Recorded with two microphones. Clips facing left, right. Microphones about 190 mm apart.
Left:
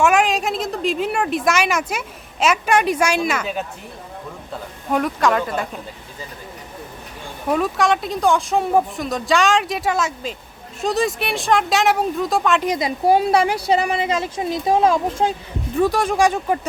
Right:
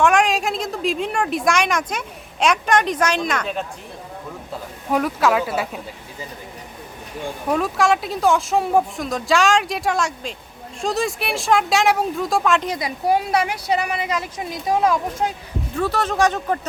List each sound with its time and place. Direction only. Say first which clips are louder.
0.0 s a woman's voice: even; 5° left (ahead or behind)
7.4 s a woman's voice: left 1 dB; centre (ahead or behind)
12.6 s speech: left 4 dB; 15° left (ahead or behind)
13.1 s a woman's voice: left 4 dB; 30° left (ahead or behind)
15.8 s speech: left 3 dB; 15° left (ahead or behind)